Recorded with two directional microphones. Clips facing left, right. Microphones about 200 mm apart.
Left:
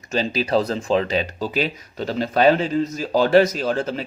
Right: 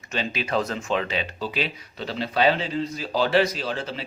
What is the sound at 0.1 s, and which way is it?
Speech, 35° left (ahead or behind).